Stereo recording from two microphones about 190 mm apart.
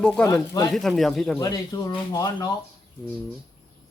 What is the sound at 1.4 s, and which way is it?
Speech, 20° left (ahead or behind).